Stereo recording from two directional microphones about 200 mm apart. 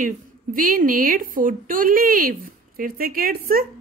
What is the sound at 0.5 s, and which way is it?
A woman's voice, 45° right (ahead or behind).